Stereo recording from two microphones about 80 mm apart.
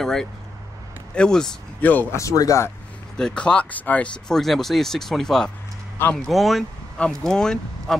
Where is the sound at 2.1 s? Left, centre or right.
Left.